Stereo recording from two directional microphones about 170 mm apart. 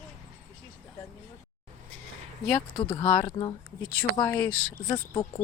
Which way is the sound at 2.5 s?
5° left (ahead or behind).